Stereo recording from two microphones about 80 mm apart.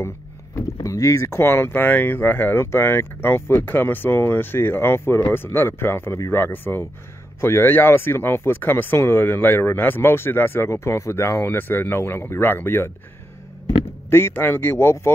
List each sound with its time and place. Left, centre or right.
0.6 s speech: left
14.1 s speech: left